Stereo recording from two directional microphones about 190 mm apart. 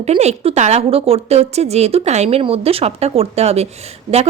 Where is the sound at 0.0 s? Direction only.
35° right (ahead or behind).